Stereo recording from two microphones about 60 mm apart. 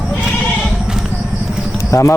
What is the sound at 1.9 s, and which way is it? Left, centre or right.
Speech, left.